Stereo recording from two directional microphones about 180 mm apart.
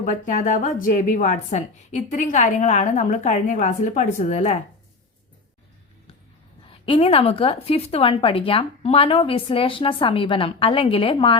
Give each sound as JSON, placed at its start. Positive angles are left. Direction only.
{"t": 0.0, "sound": "a woman's voice", "side_deg": 45}
{"t": 6.7, "sound": "a woman's voice", "side_deg": 30}